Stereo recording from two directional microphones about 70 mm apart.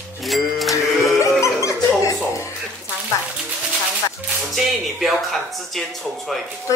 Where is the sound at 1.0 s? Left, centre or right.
Left.